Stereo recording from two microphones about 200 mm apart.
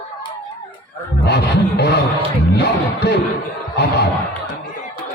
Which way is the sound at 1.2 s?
55° left (ahead or behind).